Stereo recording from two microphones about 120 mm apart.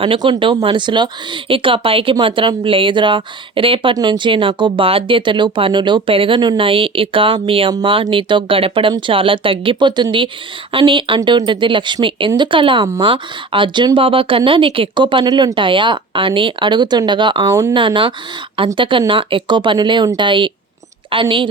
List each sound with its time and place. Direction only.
0.0 s speech: 45° right (ahead or behind)
3.9 s speech: 35° right (ahead or behind)
17.5 s speech: 25° right (ahead or behind)
17.7 s speech: 40° right (ahead or behind)